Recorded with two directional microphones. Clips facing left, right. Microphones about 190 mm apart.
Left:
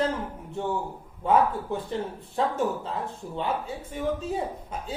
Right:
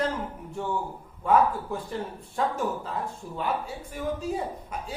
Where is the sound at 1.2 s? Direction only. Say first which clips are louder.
Even; 25° left (ahead or behind).